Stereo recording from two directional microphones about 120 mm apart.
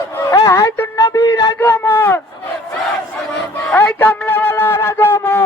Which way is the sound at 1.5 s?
15° left (ahead or behind).